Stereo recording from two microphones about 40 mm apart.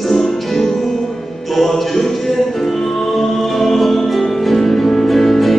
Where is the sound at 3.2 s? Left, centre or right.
Centre.